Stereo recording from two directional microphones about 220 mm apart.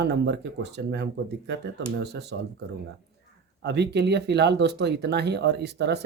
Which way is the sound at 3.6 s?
50° right (ahead or behind).